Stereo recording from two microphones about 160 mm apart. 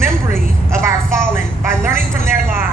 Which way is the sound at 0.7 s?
15° right (ahead or behind).